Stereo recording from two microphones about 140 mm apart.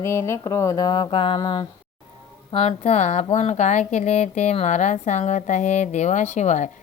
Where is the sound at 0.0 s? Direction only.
20° left (ahead or behind).